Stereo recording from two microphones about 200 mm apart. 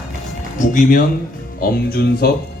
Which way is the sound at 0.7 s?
45° left (ahead or behind).